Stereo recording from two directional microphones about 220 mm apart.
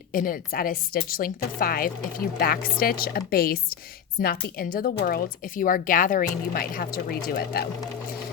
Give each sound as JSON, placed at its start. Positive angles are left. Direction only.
{"t": 0.1, "sound": "speech", "side_deg": 40}